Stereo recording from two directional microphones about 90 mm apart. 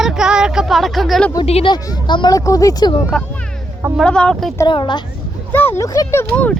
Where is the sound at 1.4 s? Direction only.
50° left (ahead or behind).